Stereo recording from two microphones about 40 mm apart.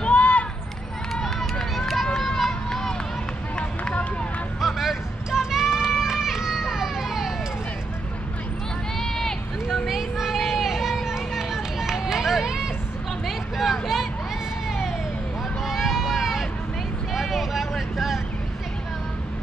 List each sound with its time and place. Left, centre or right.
0.0 s run: left
1.2 s run: centre
3.5 s run: left
4.6 s run: centre
9.0 s run: centre
9.7 s a sound: centre
13.6 s vehicle: centre
15.6 s a sound: centre
17.1 s vehicle: centre